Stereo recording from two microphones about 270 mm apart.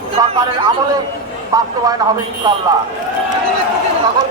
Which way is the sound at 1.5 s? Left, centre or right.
Centre.